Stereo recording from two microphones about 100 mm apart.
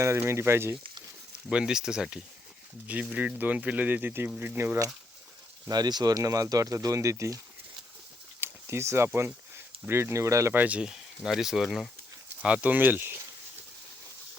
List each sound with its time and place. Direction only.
0.0 s speech: 30° right (ahead or behind)
1.5 s speech: 10° right (ahead or behind)
5.6 s speech: 40° right (ahead or behind)
8.4 s a sound: 25° right (ahead or behind)
9.0 s speech: 25° right (ahead or behind)
10.5 s speech: 15° right (ahead or behind)
12.4 s speech: 15° right (ahead or behind)